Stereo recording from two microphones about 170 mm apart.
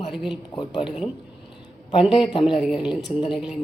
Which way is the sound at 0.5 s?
25° left (ahead or behind).